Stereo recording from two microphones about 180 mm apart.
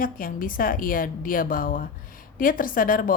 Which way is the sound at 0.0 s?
50° left (ahead or behind).